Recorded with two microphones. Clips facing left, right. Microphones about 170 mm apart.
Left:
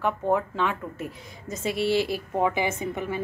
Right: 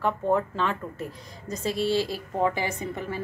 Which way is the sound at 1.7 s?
60° left (ahead or behind).